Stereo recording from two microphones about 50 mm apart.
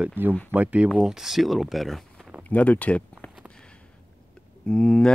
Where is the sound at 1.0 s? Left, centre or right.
Centre.